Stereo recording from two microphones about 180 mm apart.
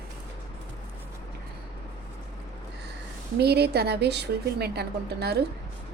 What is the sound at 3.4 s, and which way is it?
A woman's voice, 65° right (ahead or behind).